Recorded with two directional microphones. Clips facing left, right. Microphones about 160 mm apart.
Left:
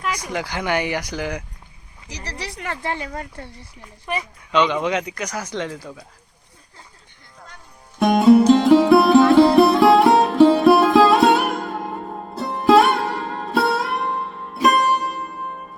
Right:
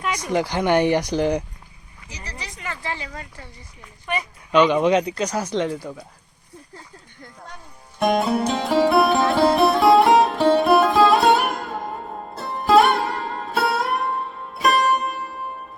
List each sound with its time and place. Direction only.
0.0 s speech: centre (ahead or behind)
0.3 s speech: 25° right (ahead or behind)
2.0 s speech: 75° left (ahead or behind); by 3.7 s 60° left (ahead or behind)
4.5 s speech: 15° right (ahead or behind)
7.9 s music: centre (ahead or behind)